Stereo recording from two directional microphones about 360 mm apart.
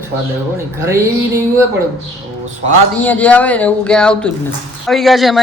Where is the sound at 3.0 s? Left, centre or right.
Centre.